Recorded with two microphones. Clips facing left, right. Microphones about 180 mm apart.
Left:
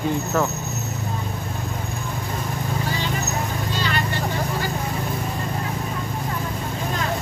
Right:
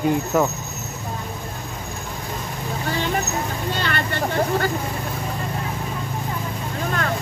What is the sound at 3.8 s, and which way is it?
Vehicle, 60° right (ahead or behind).